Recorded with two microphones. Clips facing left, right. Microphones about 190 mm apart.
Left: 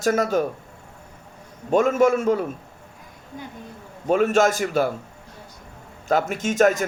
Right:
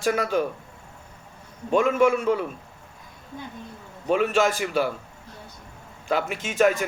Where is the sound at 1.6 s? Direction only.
45° left (ahead or behind).